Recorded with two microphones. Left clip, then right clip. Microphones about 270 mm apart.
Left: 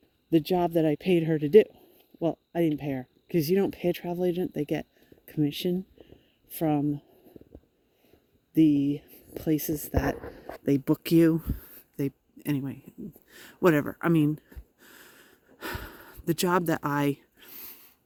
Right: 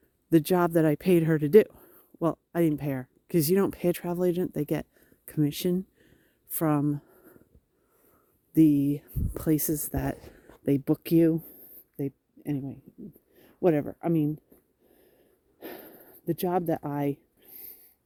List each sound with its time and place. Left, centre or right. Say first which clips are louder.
0.3 s a woman's voice: right 1 dB; right
8.5 s speech: right 1 dB; right
10.7 s speech: left 1 dB; centre; by 14.4 s left
14.8 s sniff: left 10 dB; left